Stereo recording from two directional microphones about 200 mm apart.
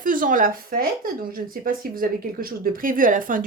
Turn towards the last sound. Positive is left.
turn(degrees=-40)  # may be behind; listen again after turning